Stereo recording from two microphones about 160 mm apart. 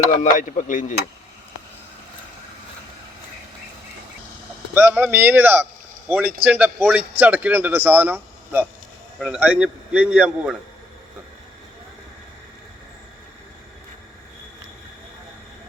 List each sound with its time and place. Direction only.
0.1 s speech: 55° left (ahead or behind)
4.7 s a man's voice: 10° right (ahead or behind)
9.1 s a man's voice: centre (ahead or behind)